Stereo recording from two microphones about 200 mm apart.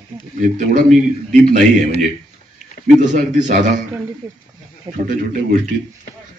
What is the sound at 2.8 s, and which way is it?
Speech, 40° right (ahead or behind).